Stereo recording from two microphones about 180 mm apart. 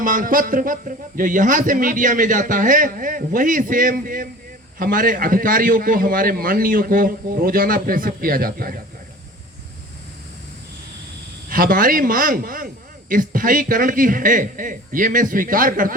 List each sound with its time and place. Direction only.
0.0 s speech: 50° right (ahead or behind)
11.4 s speech: 50° right (ahead or behind)